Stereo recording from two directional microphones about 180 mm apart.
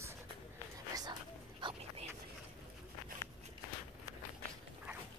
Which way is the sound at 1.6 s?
25° right (ahead or behind).